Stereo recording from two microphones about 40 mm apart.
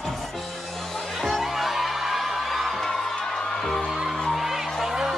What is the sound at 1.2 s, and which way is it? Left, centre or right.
Music, centre.